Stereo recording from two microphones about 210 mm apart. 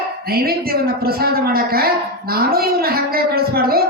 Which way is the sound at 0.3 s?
45° right (ahead or behind).